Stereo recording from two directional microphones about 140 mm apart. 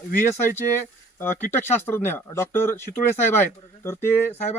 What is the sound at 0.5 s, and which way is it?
Speech, 15° left (ahead or behind).